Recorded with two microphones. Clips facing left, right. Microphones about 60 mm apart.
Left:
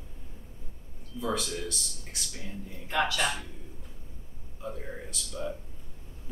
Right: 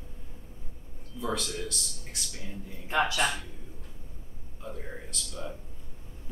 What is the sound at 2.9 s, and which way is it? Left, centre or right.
Speech, right.